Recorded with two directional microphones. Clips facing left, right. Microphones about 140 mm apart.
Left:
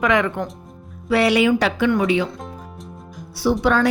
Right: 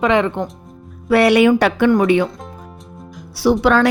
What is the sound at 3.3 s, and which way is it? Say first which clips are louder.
Speech: right 4 dB; 90° right.